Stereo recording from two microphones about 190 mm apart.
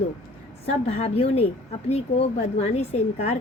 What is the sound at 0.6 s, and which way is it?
A woman's voice, 35° left (ahead or behind).